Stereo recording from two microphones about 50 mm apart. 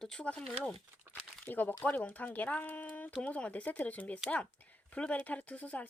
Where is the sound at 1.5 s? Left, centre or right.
Left.